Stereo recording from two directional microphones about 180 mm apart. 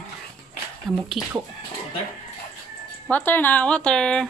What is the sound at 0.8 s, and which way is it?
Speech, centre (ahead or behind).